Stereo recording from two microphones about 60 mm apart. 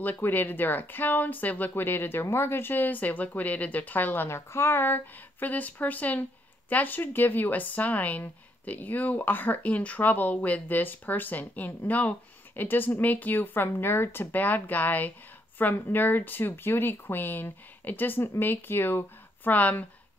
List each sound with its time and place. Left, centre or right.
0.0 s speech: left